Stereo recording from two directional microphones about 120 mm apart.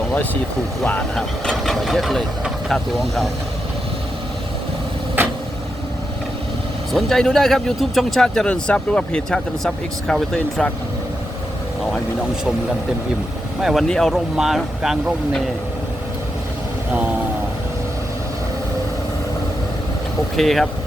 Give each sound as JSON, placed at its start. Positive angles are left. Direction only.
{"t": 1.1, "sound": "speech", "side_deg": 0}
{"t": 5.2, "sound": "vehicle", "side_deg": -20}
{"t": 6.9, "sound": "speech", "side_deg": 5}
{"t": 13.6, "sound": "speech", "side_deg": 0}
{"t": 20.3, "sound": "speech", "side_deg": 0}